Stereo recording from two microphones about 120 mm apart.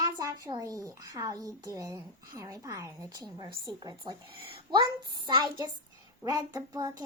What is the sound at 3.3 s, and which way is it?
A woman's voice, 40° right (ahead or behind).